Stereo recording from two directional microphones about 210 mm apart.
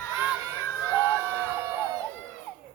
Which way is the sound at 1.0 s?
10° right (ahead or behind).